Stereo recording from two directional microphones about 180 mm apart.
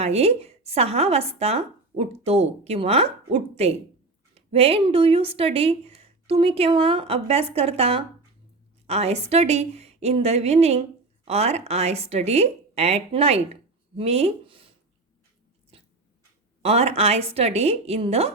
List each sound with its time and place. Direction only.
0.0 s a woman's voice: 35° right (ahead or behind)
15.7 s dog: 30° right (ahead or behind)
16.6 s a woman's voice: 35° right (ahead or behind)